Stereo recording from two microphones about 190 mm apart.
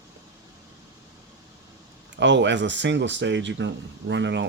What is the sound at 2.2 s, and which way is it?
Speech, 70° right (ahead or behind).